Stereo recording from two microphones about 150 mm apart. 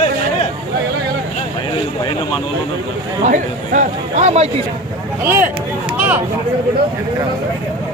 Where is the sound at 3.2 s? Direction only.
60° right (ahead or behind).